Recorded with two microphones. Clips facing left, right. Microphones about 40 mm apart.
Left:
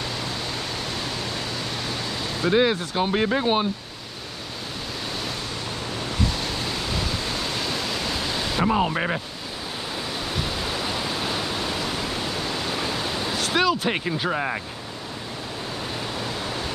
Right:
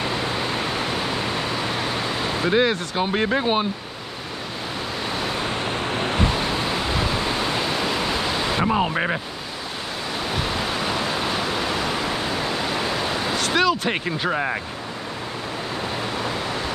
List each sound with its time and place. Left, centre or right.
0.0 s a sound: right
2.5 s speech: centre
5.1 s vehicle: right
5.4 s a sound: right; by 9.2 s centre
10.3 s pink noise: centre
13.3 s speech: centre